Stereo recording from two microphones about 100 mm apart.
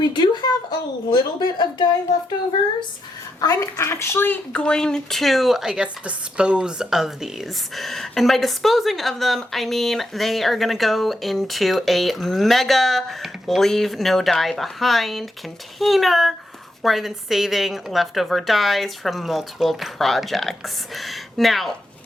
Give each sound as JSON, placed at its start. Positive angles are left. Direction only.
{"t": 0.0, "sound": "speech", "side_deg": 45}
{"t": 3.4, "sound": "a woman's voice", "side_deg": 40}
{"t": 3.8, "sound": "speech", "side_deg": 25}
{"t": 4.5, "sound": "a woman's voice", "side_deg": 10}